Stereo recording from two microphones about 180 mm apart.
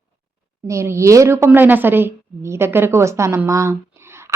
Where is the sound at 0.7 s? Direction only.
15° right (ahead or behind).